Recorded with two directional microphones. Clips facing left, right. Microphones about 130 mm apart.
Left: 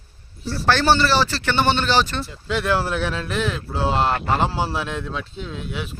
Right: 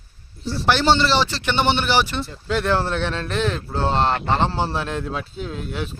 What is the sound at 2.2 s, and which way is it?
Speech, centre (ahead or behind).